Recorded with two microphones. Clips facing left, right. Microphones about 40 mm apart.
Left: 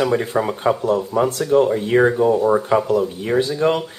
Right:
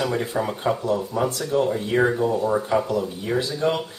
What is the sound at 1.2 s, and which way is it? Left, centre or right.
Speech, left.